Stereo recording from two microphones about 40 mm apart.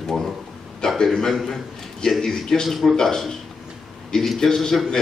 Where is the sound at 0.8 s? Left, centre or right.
Centre.